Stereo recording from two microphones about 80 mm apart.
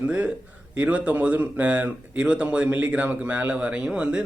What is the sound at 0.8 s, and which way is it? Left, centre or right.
A man's voice, centre.